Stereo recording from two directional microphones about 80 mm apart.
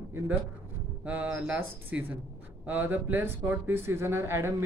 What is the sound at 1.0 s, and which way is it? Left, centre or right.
A man's voice, centre.